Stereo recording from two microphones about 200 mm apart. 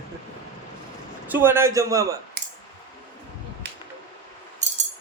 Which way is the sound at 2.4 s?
50° right (ahead or behind).